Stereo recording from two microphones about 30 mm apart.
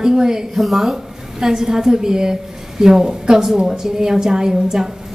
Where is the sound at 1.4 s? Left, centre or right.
Centre.